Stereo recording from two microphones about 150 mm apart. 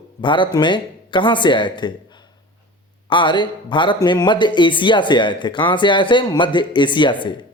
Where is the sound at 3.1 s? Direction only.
30° left (ahead or behind).